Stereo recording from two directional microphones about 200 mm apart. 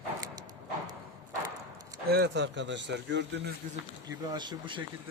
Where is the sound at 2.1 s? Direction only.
60° right (ahead or behind).